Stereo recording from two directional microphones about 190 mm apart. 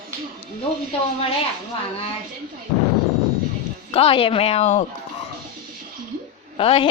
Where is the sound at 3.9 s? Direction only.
30° left (ahead or behind).